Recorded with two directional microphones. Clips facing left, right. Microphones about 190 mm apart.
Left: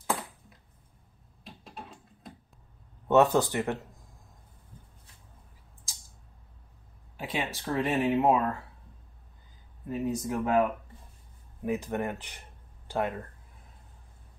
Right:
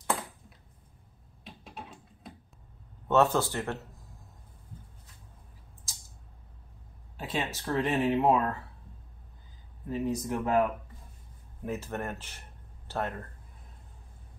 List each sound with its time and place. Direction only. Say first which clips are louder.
0.0 s a sound: even; centre (ahead or behind)
3.1 s speech: left 3 dB; 15° left (ahead or behind)
7.2 s a sound: even; 15° left (ahead or behind)
7.6 s speech: even; 5° left (ahead or behind)
9.8 s speech: even; 5° left (ahead or behind)
11.6 s speech: left 4 dB; 15° left (ahead or behind)